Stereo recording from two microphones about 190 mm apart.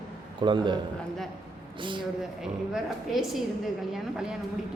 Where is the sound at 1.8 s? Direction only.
25° right (ahead or behind).